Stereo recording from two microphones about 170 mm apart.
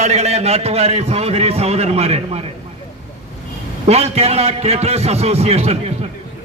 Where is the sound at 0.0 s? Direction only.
40° right (ahead or behind).